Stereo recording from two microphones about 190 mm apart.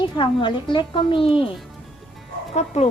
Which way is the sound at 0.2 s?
25° left (ahead or behind).